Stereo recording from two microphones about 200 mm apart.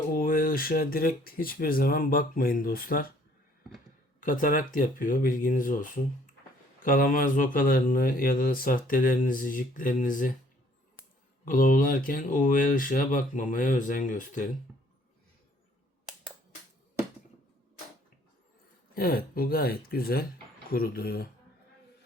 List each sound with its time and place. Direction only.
0.2 s speech: 45° left (ahead or behind)
4.2 s speech: 40° left (ahead or behind)
11.4 s speech: 45° left (ahead or behind)
14.7 s a sound: 5° right (ahead or behind)
18.9 s speech: 45° left (ahead or behind)